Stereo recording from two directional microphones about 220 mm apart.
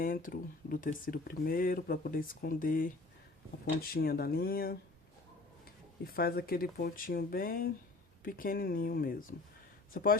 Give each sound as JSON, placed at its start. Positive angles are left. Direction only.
{"t": 0.0, "sound": "speech", "side_deg": 40}
{"t": 6.1, "sound": "speech", "side_deg": 45}